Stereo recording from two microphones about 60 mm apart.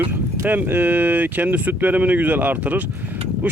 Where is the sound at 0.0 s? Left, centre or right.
Right.